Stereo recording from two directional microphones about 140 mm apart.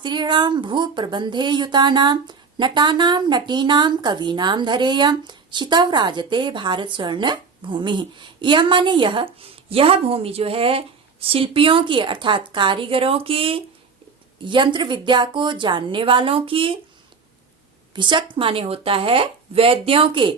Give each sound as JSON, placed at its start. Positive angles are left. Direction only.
{"t": 0.0, "sound": "speech", "side_deg": -35}
{"t": 17.9, "sound": "speech", "side_deg": -35}